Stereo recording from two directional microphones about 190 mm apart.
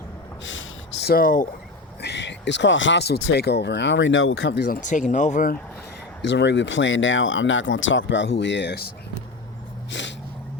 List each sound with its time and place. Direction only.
1.0 s speech: 50° left (ahead or behind)
2.0 s speech: 65° left (ahead or behind)
4.7 s speech: 40° left (ahead or behind)
6.2 s speech: 70° left (ahead or behind)
9.9 s a sound: 70° left (ahead or behind)